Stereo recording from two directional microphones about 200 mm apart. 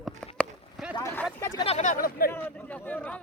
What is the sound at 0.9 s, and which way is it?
Vehicle, 15° left (ahead or behind).